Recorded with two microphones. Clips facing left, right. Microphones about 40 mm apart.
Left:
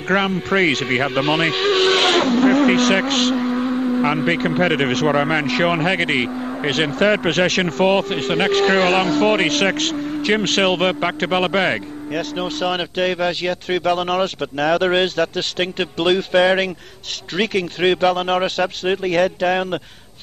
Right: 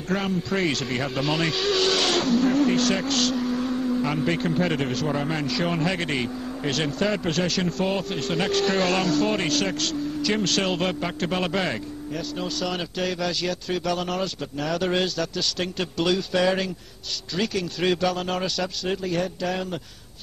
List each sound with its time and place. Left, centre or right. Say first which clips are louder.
0.1 s a man's voice: left 8 dB; left